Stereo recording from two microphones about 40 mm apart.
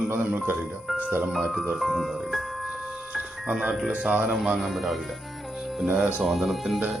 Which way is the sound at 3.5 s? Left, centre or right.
Centre.